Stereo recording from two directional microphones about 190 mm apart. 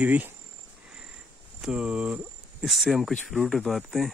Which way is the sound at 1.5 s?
5° right (ahead or behind).